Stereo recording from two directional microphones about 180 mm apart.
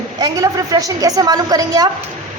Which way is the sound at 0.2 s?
20° right (ahead or behind).